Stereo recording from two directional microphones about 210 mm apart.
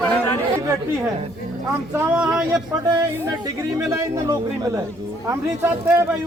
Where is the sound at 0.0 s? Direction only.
10° left (ahead or behind).